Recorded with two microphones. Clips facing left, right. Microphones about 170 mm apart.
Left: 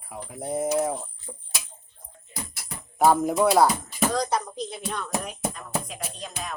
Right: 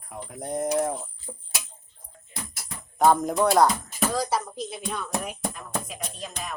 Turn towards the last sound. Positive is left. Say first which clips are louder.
# even
turn(degrees=0)  # may be behind; listen again after turning